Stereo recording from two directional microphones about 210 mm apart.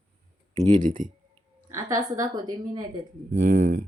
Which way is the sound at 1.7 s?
15° right (ahead or behind).